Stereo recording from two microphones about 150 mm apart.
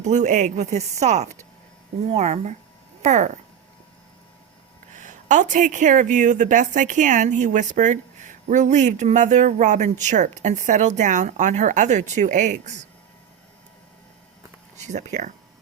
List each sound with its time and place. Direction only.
0.0 s speech: 55° right (ahead or behind)
4.9 s speech: 55° right (ahead or behind)
14.8 s speech: 50° right (ahead or behind)